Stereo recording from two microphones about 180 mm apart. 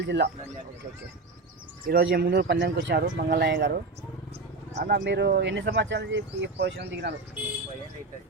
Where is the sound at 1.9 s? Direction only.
60° right (ahead or behind).